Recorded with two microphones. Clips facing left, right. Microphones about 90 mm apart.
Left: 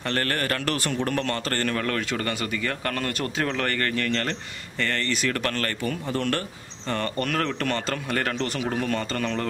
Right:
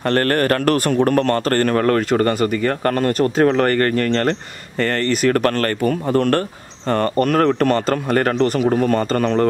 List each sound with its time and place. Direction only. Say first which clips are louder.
0.0 s speech: right 10 dB; 45° right (ahead or behind)